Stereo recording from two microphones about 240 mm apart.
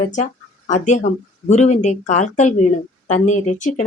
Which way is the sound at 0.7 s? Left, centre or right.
Left.